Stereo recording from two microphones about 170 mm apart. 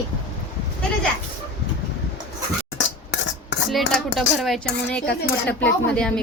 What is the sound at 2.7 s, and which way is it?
Cutlery, 90° left.